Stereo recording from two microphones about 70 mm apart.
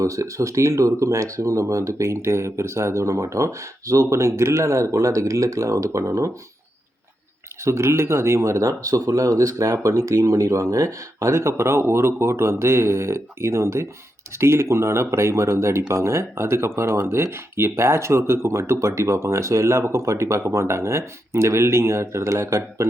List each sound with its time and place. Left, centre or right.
0.0 s speech: right
7.6 s speech: right